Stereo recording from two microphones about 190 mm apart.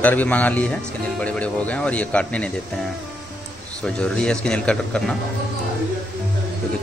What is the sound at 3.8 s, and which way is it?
Speech, 5° left (ahead or behind).